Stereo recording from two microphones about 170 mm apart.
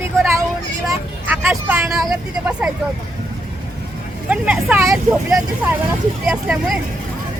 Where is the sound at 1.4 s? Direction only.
15° right (ahead or behind).